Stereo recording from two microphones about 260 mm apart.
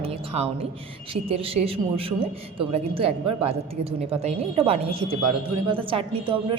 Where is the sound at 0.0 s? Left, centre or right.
Right.